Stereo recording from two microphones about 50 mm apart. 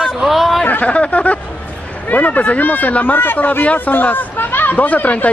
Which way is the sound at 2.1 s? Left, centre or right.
Left.